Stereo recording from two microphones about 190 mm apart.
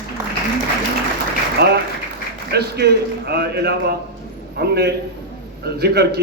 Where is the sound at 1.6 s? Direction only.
60° right (ahead or behind).